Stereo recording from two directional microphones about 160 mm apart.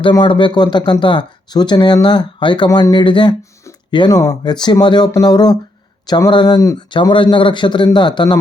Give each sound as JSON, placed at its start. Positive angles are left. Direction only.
{"t": 0.0, "sound": "speech", "side_deg": 30}